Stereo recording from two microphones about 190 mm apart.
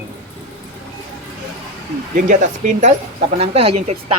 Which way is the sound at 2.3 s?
40° right (ahead or behind).